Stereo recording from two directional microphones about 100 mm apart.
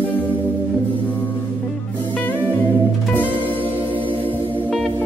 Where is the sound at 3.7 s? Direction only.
15° right (ahead or behind).